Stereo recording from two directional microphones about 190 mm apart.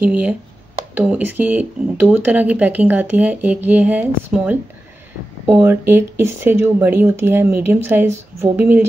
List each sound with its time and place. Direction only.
0.0 s speech: 10° right (ahead or behind)